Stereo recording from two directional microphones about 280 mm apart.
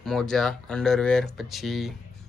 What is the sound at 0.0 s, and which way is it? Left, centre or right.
Speech, centre.